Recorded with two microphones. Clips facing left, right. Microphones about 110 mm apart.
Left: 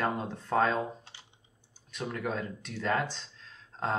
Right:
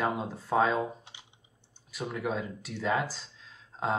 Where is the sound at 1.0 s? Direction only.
15° right (ahead or behind).